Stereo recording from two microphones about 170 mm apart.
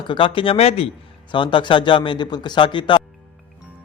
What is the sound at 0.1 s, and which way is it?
A man's voice, 30° left (ahead or behind).